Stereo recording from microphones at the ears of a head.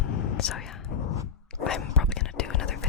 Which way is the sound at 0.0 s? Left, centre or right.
Left.